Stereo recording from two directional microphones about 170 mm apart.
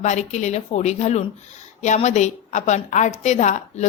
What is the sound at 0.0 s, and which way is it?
A woman's voice, 45° left (ahead or behind).